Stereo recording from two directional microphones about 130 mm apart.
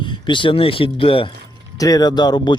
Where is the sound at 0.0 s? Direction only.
40° left (ahead or behind).